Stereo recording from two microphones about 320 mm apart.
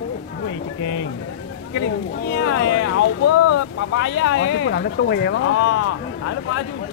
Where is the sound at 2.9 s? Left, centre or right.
Left.